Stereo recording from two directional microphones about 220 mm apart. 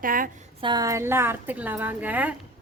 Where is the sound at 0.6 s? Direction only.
20° right (ahead or behind).